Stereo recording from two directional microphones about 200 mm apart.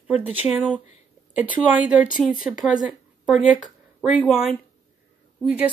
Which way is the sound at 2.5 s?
Centre (ahead or behind).